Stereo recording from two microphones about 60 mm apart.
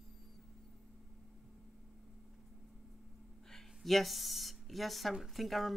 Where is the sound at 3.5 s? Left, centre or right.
Centre.